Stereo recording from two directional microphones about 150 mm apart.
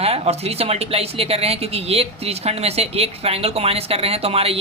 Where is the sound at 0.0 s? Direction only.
45° right (ahead or behind).